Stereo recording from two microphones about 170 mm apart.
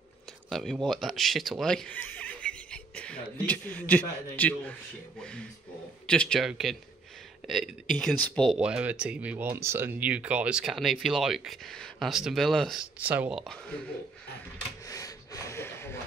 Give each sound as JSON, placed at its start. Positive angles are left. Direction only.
{"t": 0.5, "sound": "speech", "side_deg": 0}
{"t": 8.5, "sound": "speech", "side_deg": -5}
{"t": 13.0, "sound": "speech", "side_deg": -10}
{"t": 14.9, "sound": "gasp", "side_deg": 20}